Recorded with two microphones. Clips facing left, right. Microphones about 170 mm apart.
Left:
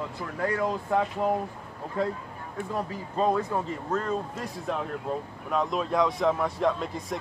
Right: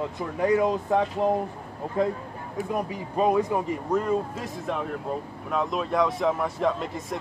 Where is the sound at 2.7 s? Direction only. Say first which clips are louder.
Right 2 dB; 15° right (ahead or behind).